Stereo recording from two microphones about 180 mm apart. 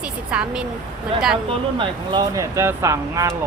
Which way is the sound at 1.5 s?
25° right (ahead or behind).